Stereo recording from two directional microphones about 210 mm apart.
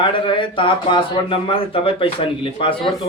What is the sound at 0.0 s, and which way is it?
Speech, 25° left (ahead or behind).